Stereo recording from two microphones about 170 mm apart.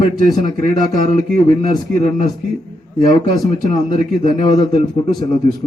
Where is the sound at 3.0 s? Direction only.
25° left (ahead or behind).